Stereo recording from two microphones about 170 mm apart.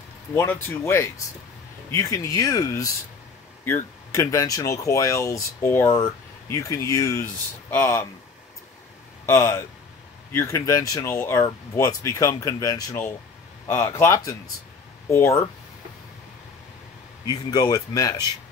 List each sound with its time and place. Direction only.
0.3 s speech: 15° left (ahead or behind)
9.2 s speech: 15° left (ahead or behind)
17.3 s speech: 25° left (ahead or behind)